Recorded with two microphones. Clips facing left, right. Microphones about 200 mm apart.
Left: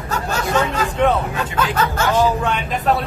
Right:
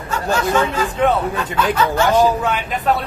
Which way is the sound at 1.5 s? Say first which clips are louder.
Right 3 dB; 45° left (ahead or behind).